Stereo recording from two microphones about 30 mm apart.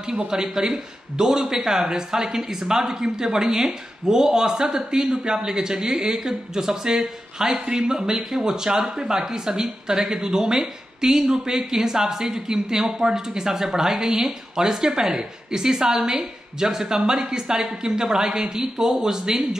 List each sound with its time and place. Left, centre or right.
0.3 s speech: right